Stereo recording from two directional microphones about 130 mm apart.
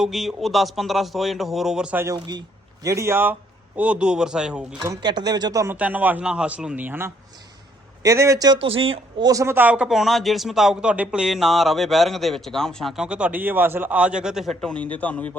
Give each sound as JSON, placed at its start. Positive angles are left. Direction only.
{"t": 0.0, "sound": "speech", "side_deg": 0}
{"t": 2.1, "sound": "a man's voice", "side_deg": -30}
{"t": 4.8, "sound": "speech", "side_deg": -30}
{"t": 5.7, "sound": "a man's voice", "side_deg": -10}
{"t": 8.5, "sound": "speech", "side_deg": -45}
{"t": 9.2, "sound": "speech", "side_deg": -25}
{"t": 14.6, "sound": "a man's voice", "side_deg": 10}